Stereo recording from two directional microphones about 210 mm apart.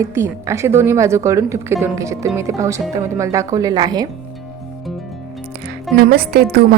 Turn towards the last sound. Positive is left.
turn(degrees=-45)  # may be behind; listen again after turning